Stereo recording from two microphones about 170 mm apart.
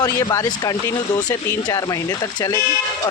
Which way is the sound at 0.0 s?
20° left (ahead or behind).